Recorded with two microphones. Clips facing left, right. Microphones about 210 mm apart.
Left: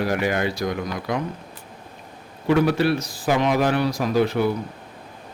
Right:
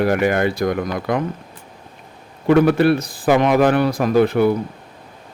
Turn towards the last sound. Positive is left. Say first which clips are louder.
# right 5 dB
turn(degrees=-55)  # may be behind; listen again after turning